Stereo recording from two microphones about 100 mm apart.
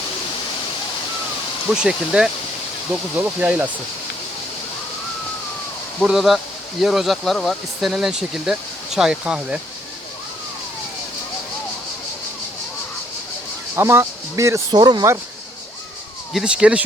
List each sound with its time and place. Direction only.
1.7 s speech: 10° right (ahead or behind)
6.0 s speech: 5° right (ahead or behind)
13.7 s speech: 25° right (ahead or behind)
14.7 s speech: 45° right (ahead or behind)
16.3 s speech: 10° right (ahead or behind)